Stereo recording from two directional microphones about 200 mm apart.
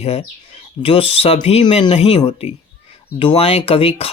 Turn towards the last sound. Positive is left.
turn(degrees=30)  # may be behind; listen again after turning